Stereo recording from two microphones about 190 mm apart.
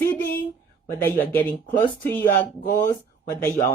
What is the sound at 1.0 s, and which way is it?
Speech, 10° left (ahead or behind).